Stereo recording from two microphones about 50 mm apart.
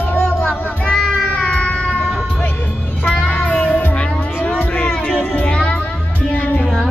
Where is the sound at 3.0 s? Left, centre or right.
Centre.